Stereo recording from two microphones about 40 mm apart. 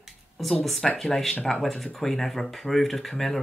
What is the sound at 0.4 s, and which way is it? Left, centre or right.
Speech, centre.